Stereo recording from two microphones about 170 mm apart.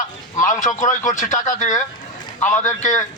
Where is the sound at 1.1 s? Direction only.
45° left (ahead or behind).